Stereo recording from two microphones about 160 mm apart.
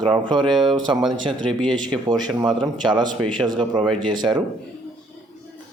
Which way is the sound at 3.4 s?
30° right (ahead or behind).